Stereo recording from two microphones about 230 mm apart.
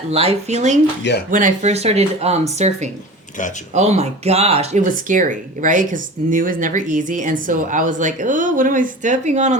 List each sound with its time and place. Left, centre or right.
0.1 s speech: right